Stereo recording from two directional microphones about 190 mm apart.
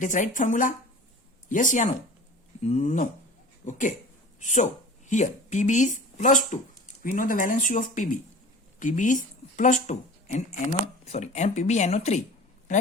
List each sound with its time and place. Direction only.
0.0 s speech: 40° left (ahead or behind)